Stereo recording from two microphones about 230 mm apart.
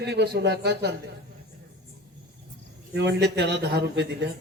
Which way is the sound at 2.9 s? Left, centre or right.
Right.